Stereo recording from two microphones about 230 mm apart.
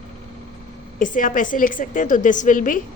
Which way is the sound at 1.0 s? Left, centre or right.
Left.